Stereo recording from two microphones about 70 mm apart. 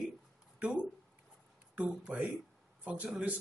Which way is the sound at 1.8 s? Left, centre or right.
Centre.